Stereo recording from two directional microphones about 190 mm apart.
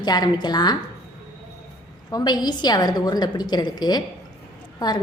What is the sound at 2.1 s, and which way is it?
A woman's voice, 20° left (ahead or behind).